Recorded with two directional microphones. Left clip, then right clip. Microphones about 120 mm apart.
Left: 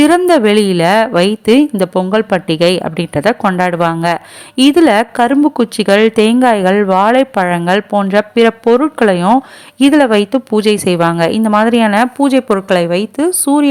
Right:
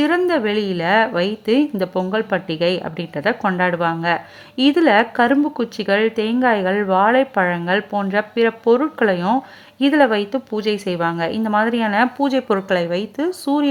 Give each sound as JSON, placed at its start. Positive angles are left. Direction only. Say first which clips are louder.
{"t": 0.0, "sound": "a woman's voice", "louder": "left 9 dB", "side_deg": 40}